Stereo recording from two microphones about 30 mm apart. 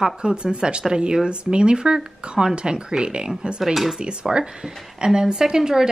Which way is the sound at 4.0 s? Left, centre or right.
Right.